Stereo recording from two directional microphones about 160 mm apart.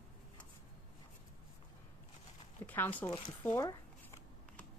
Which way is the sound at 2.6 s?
10° left (ahead or behind).